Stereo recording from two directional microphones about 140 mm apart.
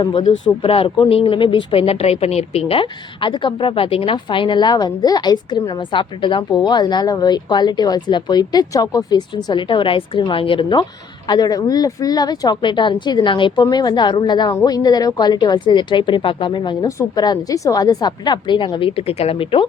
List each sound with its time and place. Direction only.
0.0 s speech: 30° left (ahead or behind)